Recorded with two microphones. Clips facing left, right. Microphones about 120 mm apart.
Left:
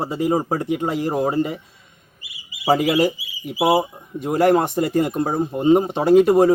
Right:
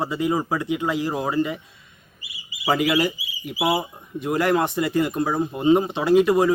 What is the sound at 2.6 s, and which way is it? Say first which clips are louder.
A man's voice: left 3 dB; 35° left (ahead or behind).